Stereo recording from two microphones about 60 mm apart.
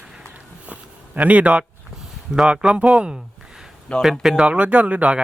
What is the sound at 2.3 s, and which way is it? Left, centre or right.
Speech, centre.